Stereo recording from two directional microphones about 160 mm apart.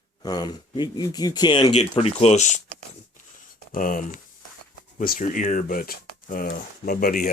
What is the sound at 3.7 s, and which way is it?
Speech, 55° left (ahead or behind).